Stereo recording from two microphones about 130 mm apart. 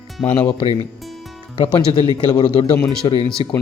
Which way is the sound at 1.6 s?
45° left (ahead or behind).